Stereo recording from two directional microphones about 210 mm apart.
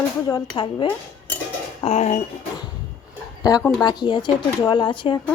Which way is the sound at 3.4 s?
15° left (ahead or behind).